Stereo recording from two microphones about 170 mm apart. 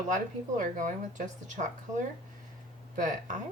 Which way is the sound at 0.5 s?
50° right (ahead or behind).